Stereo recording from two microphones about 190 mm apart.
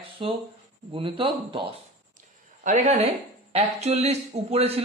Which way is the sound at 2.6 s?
40° right (ahead or behind).